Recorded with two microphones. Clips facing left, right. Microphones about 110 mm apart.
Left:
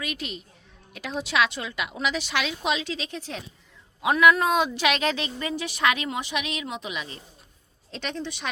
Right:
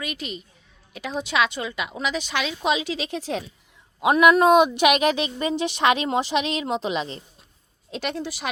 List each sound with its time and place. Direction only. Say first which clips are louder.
0.0 s a woman's voice: right 1 dB; centre (ahead or behind)
2.7 s a woman's voice: right 3 dB; 10° right (ahead or behind)
3.0 s a woman's voice: right 5 dB; 75° right (ahead or behind)
4.0 s a woman's voice: right 4 dB; 20° right (ahead or behind)
7.9 s a woman's voice: right 4 dB; 10° right (ahead or behind)